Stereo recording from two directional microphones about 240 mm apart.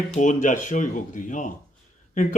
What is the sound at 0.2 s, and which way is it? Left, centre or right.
Speech, left.